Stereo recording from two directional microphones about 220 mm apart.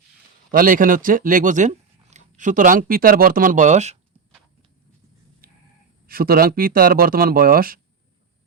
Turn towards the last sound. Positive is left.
turn(degrees=-40)  # may be behind; listen again after turning